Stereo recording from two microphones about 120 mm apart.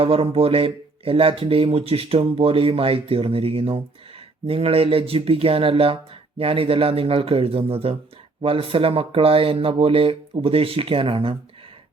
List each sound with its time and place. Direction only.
0.0 s speech: 55° right (ahead or behind)